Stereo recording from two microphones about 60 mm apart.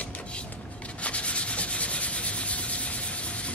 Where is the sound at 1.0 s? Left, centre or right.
Left.